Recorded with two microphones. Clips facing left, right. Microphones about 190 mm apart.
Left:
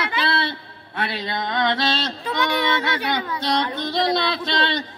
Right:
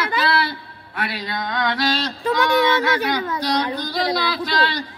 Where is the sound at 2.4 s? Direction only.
45° right (ahead or behind).